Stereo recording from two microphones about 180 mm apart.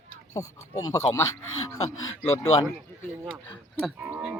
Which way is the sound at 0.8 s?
15° left (ahead or behind).